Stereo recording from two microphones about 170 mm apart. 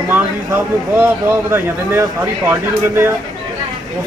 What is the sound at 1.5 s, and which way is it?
Speech, 15° right (ahead or behind).